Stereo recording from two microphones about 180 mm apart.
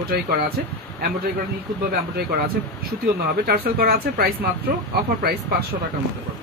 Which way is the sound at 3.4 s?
60° right (ahead or behind).